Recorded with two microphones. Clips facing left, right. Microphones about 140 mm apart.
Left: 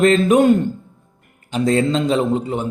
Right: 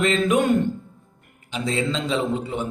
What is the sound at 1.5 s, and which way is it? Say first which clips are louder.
A man's voice: left 8 dB; 45° left (ahead or behind).